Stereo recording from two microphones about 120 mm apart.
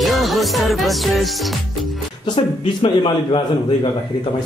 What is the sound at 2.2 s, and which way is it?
A man's voice, 45° left (ahead or behind).